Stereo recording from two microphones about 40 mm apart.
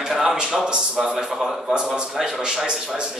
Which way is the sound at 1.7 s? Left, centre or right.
Right.